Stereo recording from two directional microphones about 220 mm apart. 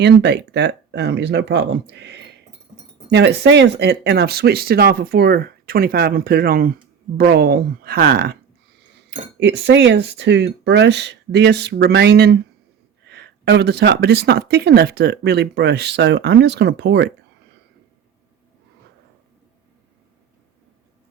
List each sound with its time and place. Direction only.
0.0 s speech: 50° right (ahead or behind)